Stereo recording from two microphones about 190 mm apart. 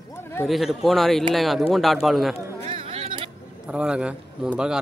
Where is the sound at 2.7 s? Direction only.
30° right (ahead or behind).